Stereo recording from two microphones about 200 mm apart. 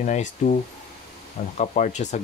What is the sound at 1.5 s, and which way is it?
Speech, 35° left (ahead or behind).